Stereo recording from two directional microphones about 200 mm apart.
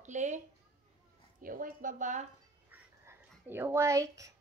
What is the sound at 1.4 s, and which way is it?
Speech, 45° right (ahead or behind).